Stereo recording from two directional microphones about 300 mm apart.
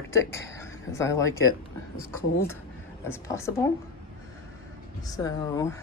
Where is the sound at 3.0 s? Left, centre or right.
Centre.